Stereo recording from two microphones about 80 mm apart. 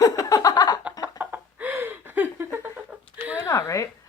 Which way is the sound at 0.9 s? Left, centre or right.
Left.